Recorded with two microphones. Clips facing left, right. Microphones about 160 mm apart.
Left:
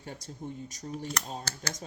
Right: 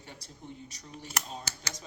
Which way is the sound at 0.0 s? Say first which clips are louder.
Left 7 dB; 45° left (ahead or behind).